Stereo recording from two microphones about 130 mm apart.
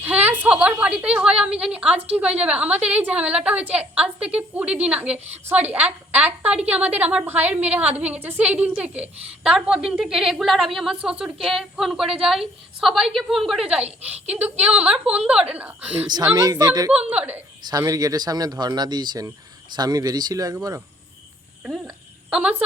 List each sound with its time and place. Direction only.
0.0 s a woman's voice: 15° right (ahead or behind)
16.3 s speech: 30° right (ahead or behind)
16.9 s a woman's voice: 10° right (ahead or behind)
17.6 s speech: 30° right (ahead or behind)
21.6 s a sound: 5° right (ahead or behind)